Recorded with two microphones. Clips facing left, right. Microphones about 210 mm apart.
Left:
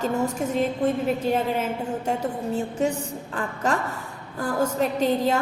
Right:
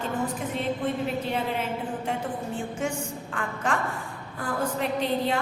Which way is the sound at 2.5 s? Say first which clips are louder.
Left 7 dB; 35° left (ahead or behind).